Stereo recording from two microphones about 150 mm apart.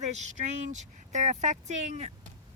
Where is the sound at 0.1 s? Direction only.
50° right (ahead or behind).